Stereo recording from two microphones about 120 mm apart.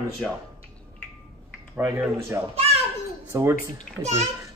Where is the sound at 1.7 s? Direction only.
20° right (ahead or behind).